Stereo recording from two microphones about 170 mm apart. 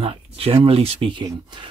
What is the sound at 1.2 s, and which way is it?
Speech, 25° right (ahead or behind).